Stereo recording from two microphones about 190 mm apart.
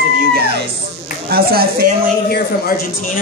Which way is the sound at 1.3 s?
50° right (ahead or behind).